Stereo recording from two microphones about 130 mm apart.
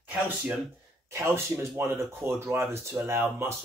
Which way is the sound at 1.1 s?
20° right (ahead or behind).